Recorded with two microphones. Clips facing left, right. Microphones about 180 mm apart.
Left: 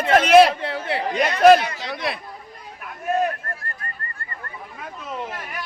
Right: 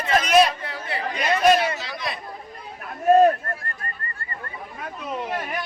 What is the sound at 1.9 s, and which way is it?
Chatter, 55° left (ahead or behind).